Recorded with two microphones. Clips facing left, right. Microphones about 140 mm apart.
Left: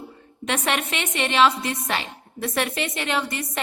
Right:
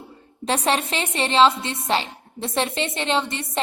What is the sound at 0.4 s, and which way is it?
A woman's voice, 30° right (ahead or behind).